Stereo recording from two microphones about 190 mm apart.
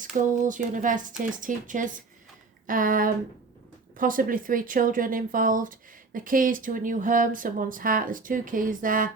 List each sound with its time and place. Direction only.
0.3 s speech: 40° right (ahead or behind)